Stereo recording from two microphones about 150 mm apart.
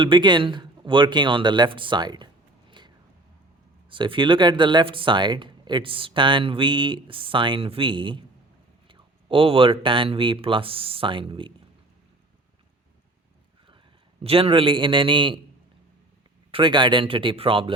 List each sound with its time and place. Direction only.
0.0 s speech: 30° right (ahead or behind)
14.3 s speech: 40° right (ahead or behind)
16.5 s speech: 35° right (ahead or behind)